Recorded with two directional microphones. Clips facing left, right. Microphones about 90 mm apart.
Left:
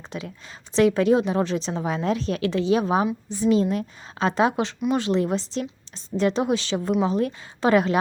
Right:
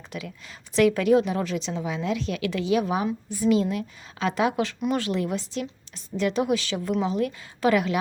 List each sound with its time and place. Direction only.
0.1 s a woman's voice: 30° left (ahead or behind)